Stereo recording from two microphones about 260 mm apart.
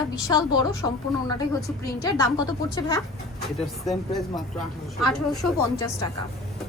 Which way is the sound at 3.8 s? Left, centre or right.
Centre.